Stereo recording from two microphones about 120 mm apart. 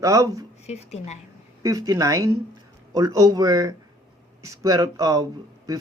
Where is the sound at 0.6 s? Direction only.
65° left (ahead or behind).